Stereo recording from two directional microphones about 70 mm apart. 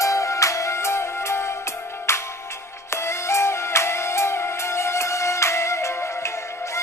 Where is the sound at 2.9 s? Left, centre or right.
Left.